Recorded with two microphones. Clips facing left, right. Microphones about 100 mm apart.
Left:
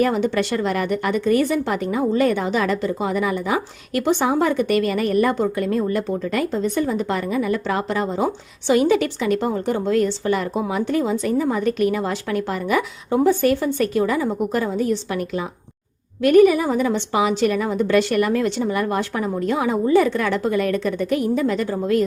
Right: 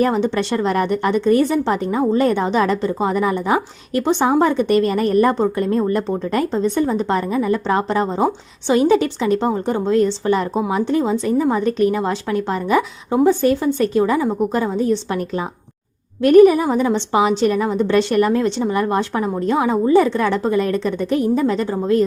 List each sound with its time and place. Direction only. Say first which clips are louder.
0.2 s a woman's voice: right 1 dB; 20° right (ahead or behind)
0.6 s a woman's voice: right 3 dB; 35° right (ahead or behind); by 11.5 s 20° right (ahead or behind)
11.5 s a woman's voice: right 3 dB; 30° right (ahead or behind)
16.2 s a woman's voice: right 3 dB; 35° right (ahead or behind)